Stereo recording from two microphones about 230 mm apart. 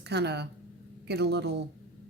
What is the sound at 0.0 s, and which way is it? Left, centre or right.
A woman's voice, right.